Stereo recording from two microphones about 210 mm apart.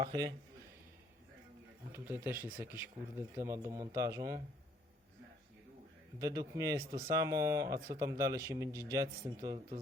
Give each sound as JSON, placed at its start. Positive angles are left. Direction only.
{"t": 0.0, "sound": "speech", "side_deg": -20}
{"t": 1.9, "sound": "speech", "side_deg": -10}
{"t": 6.1, "sound": "speech", "side_deg": -15}